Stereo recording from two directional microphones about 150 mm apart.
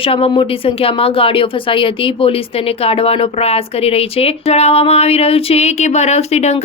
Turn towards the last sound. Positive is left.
turn(degrees=45)  # may be behind; listen again after turning